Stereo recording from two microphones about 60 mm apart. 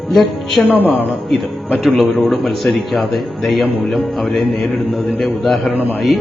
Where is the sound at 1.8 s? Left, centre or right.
Centre.